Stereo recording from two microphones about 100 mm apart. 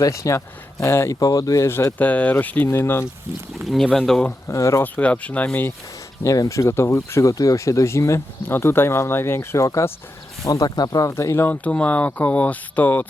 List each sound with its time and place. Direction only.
0.0 s speech: 30° left (ahead or behind)
1.2 s speech: 40° left (ahead or behind)
2.0 s speech: 15° left (ahead or behind)
3.6 s speech: centre (ahead or behind)
4.4 s speech: 30° left (ahead or behind)
4.8 s speech: 15° left (ahead or behind)
6.2 s speech: 35° left (ahead or behind)
11.4 s speech: 15° left (ahead or behind)